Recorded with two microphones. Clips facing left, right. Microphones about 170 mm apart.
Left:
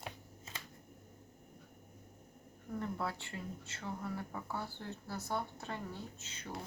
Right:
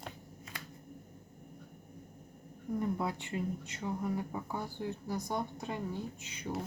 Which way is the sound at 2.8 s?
15° right (ahead or behind).